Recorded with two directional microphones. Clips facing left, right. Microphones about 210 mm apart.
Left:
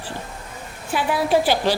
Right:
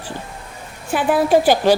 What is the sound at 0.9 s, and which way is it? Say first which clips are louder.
Speech: right 5 dB; 50° right (ahead or behind).